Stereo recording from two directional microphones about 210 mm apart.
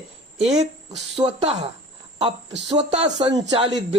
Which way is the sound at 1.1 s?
30° right (ahead or behind).